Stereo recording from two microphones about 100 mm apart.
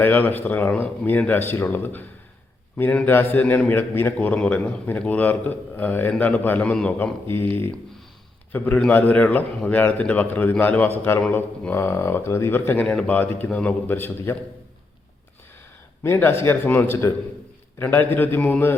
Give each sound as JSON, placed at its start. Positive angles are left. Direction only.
{"t": 0.0, "sound": "a man's voice", "side_deg": 20}
{"t": 16.0, "sound": "speech", "side_deg": 25}